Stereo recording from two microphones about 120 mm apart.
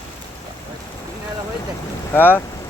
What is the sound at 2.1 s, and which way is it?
Speech, 15° left (ahead or behind).